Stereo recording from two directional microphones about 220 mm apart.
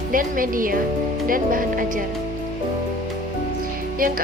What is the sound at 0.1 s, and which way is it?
Speech, 40° right (ahead or behind).